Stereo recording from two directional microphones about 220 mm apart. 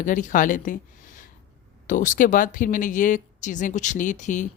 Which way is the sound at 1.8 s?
35° left (ahead or behind).